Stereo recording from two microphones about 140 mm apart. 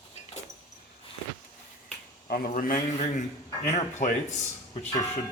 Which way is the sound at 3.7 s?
55° left (ahead or behind).